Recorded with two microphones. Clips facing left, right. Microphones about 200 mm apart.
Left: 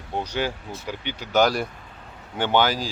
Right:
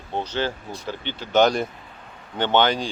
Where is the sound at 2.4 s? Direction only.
10° left (ahead or behind).